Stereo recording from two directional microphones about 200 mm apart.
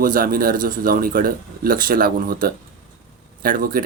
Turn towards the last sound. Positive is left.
turn(degrees=-45)  # may be behind; listen again after turning